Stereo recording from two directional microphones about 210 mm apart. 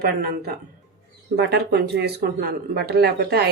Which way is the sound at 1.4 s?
50° right (ahead or behind).